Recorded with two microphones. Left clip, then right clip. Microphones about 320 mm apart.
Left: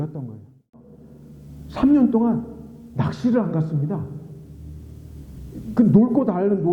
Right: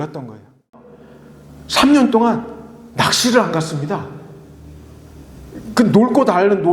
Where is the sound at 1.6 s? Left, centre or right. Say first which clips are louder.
Right 6 dB; centre.